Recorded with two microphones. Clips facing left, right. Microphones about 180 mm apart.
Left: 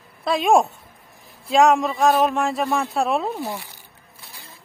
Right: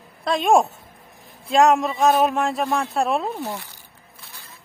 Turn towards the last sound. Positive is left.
turn(degrees=10)  # may be behind; listen again after turning